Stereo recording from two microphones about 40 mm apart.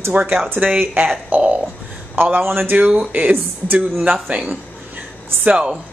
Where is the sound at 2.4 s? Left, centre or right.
Right.